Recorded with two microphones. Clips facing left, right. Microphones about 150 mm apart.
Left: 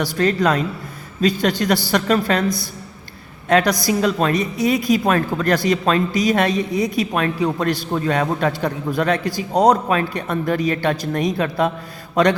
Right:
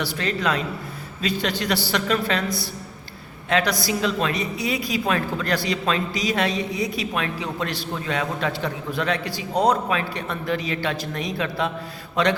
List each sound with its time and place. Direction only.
0.0 s a woman's voice: 45° left (ahead or behind)
3.5 s a woman's voice: 45° left (ahead or behind)
12.1 s mantra: 45° left (ahead or behind)